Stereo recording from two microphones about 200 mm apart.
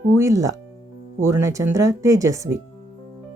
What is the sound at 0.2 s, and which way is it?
Speech, 15° right (ahead or behind).